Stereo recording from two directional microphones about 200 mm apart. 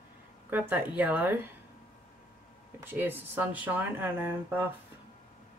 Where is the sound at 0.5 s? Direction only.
10° right (ahead or behind).